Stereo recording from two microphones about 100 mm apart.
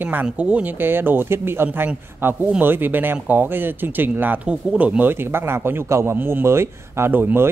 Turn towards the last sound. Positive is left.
turn(degrees=-20)  # may be behind; listen again after turning